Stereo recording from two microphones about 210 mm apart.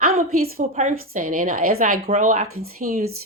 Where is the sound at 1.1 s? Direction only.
35° right (ahead or behind).